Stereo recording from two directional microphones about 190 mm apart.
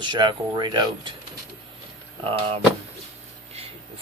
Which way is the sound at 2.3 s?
30° right (ahead or behind).